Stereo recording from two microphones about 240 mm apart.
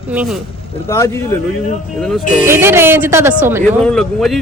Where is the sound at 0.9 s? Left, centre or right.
Centre.